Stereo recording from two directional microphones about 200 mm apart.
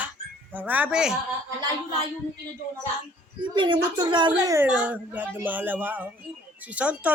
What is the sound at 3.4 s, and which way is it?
A woman's voice, 25° right (ahead or behind).